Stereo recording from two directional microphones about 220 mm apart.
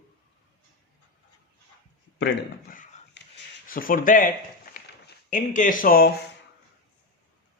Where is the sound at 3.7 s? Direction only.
40° left (ahead or behind).